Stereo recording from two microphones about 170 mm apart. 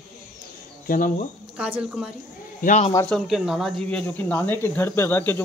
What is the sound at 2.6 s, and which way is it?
Speech, 45° left (ahead or behind).